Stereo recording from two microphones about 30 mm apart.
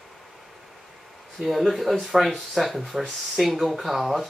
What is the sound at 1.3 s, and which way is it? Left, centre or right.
Speech, centre.